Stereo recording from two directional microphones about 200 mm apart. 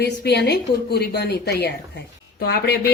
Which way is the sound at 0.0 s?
55° left (ahead or behind).